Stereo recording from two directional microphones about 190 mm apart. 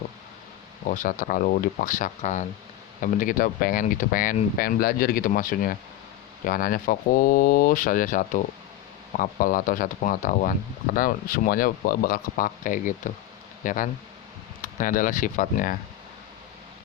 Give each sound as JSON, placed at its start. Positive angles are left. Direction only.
{"t": 0.9, "sound": "speech", "side_deg": 45}